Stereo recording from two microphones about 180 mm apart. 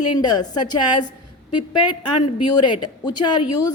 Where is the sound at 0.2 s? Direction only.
25° left (ahead or behind).